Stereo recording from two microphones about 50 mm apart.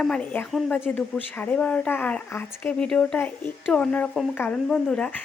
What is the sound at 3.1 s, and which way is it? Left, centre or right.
Speech, left.